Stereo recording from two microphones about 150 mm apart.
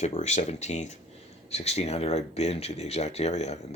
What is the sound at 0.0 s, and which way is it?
Speech, 50° left (ahead or behind).